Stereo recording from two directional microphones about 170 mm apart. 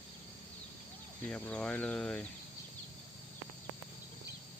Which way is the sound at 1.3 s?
5° left (ahead or behind).